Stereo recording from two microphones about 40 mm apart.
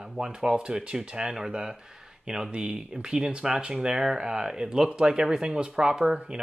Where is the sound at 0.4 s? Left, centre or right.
Right.